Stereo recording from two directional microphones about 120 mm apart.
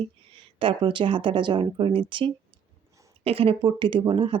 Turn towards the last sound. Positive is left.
turn(degrees=-45)  # may be behind; listen again after turning